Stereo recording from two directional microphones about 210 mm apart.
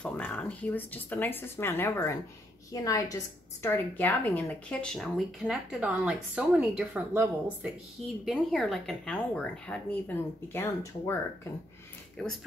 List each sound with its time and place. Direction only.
0.0 s a woman's voice: 5° left (ahead or behind)
12.2 s a woman's voice: 5° left (ahead or behind)